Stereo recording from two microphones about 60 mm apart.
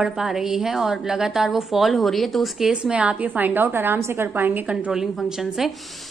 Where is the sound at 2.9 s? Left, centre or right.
Right.